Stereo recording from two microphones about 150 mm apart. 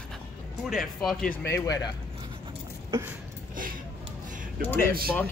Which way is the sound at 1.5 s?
25° left (ahead or behind).